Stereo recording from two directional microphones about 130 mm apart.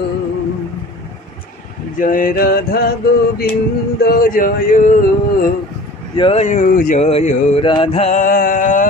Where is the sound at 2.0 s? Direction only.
90° left.